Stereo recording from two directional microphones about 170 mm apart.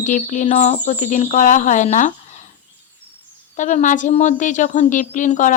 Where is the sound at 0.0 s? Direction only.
50° left (ahead or behind).